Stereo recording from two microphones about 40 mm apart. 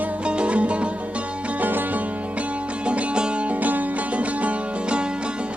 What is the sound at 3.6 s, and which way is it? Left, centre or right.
Music, right.